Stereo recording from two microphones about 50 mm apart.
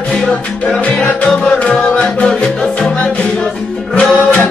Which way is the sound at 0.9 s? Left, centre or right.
Centre.